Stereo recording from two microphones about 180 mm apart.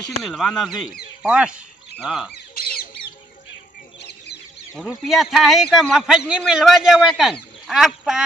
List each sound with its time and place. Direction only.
0.0 s a man's voice: centre (ahead or behind)
2.3 s squawk: 55° left (ahead or behind)
4.7 s a man's voice: centre (ahead or behind)